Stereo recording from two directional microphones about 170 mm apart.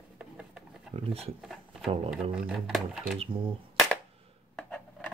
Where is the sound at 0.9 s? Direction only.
35° right (ahead or behind).